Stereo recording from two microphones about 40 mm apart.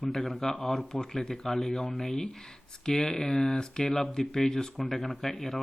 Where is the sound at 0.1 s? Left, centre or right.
Centre.